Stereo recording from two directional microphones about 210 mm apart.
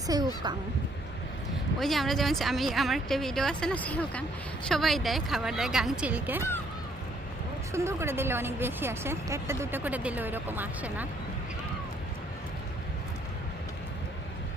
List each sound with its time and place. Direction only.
0.1 s speech: 20° right (ahead or behind)
1.8 s speech: centre (ahead or behind)
7.7 s speech: 10° right (ahead or behind)